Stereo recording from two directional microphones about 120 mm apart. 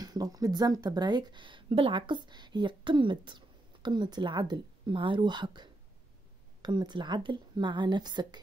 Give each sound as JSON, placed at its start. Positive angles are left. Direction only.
{"t": 0.0, "sound": "speech", "side_deg": -35}